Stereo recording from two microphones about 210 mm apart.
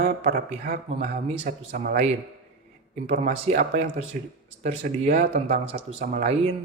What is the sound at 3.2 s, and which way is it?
Speech, 30° right (ahead or behind).